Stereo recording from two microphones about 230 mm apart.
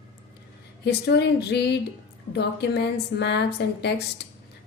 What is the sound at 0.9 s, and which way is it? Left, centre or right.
A woman's voice, left.